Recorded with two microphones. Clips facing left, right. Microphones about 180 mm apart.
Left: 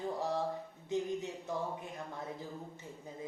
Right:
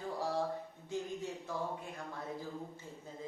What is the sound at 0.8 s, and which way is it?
Speech, 20° left (ahead or behind).